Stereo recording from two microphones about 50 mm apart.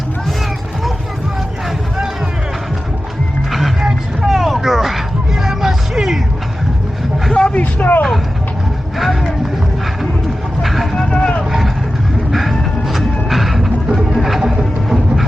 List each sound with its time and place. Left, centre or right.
3.8 s vehicle: centre
4.4 s music: centre
7.3 s vehicle: left
7.6 s a sound: left
10.6 s vehicle: centre
11.0 s vehicle: centre
12.3 s music: centre